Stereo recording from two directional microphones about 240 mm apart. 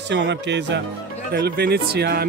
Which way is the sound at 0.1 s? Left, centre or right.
Right.